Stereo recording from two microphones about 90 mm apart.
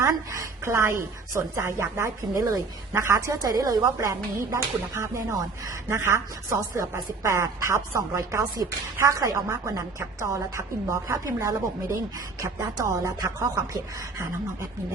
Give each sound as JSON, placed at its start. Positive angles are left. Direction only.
{"t": 0.0, "sound": "speech", "side_deg": -35}
{"t": 3.8, "sound": "speech", "side_deg": -30}